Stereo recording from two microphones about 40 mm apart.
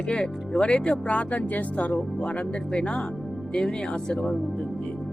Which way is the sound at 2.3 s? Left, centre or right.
Left.